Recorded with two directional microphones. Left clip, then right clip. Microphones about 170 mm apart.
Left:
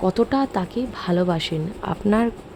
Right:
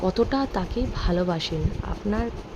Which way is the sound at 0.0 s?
15° left (ahead or behind).